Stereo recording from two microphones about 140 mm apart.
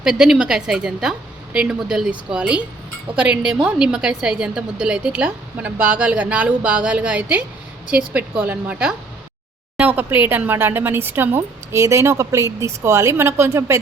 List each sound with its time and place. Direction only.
0.0 s a woman's voice: 5° right (ahead or behind); by 13.7 s 20° right (ahead or behind)